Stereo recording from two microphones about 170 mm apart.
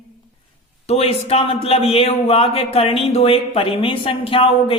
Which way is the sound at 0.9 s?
35° left (ahead or behind).